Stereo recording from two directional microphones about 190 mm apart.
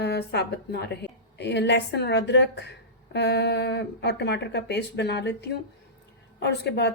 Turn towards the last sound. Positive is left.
turn(degrees=60)  # may be behind; listen again after turning